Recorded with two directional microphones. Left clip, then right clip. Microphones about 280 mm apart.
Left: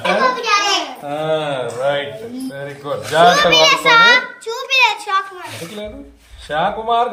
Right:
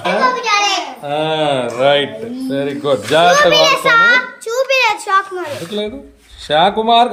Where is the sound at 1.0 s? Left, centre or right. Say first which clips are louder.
Right 5 dB; right.